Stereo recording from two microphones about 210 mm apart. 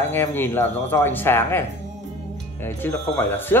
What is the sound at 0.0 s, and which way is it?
Speech, 10° left (ahead or behind).